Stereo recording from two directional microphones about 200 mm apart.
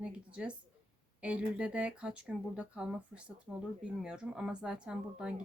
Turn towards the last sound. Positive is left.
turn(degrees=-5)  # may be behind; listen again after turning